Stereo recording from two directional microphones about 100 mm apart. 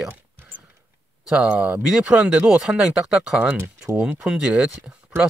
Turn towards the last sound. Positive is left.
turn(degrees=-10)  # may be behind; listen again after turning